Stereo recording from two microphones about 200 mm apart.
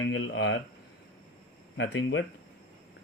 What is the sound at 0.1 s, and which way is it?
Speech, 75° left (ahead or behind).